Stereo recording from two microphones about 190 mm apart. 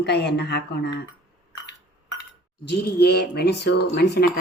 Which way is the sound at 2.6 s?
60° left (ahead or behind).